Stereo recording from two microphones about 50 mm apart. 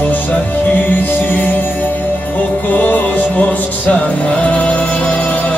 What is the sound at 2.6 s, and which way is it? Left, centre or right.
Music, left.